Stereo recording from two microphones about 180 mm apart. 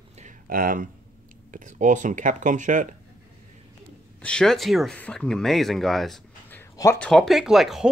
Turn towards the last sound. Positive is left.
turn(degrees=0)  # may be behind; listen again after turning